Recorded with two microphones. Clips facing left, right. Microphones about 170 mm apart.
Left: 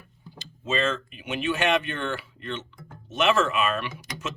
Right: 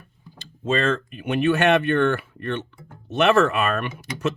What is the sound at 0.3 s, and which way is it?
Speech, 50° right (ahead or behind).